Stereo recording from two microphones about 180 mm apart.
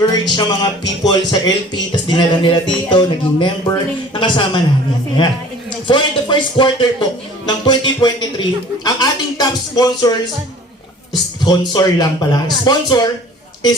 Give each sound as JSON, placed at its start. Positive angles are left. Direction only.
{"t": 0.0, "sound": "speech", "side_deg": 20}
{"t": 5.9, "sound": "speech", "side_deg": 25}
{"t": 11.4, "sound": "speech", "side_deg": 20}